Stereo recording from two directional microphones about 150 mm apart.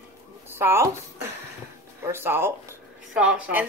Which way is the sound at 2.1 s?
15° right (ahead or behind).